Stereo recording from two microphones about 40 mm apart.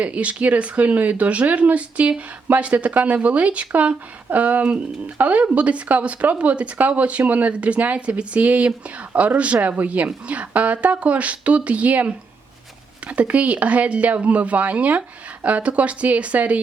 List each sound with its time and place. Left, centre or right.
0.0 s speech: right